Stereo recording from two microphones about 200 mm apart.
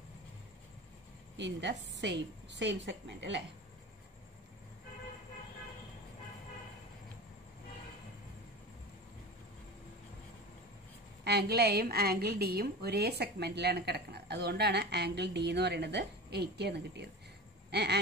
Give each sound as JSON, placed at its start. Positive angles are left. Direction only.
{"t": 1.3, "sound": "a woman's voice", "side_deg": -60}
{"t": 11.2, "sound": "a woman's voice", "side_deg": -55}
{"t": 17.6, "sound": "a sound", "side_deg": -55}